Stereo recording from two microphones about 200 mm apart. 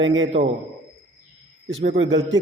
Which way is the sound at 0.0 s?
70° right (ahead or behind).